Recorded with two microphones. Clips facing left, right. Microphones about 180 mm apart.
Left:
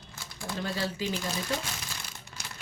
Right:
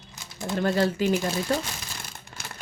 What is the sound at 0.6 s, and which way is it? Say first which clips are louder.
Speech: right 11 dB; 50° right (ahead or behind).